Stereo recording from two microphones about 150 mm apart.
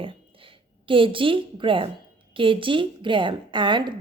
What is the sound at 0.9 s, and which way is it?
A woman's voice, 35° right (ahead or behind).